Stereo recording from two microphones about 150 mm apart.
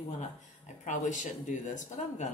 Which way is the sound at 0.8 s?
55° left (ahead or behind).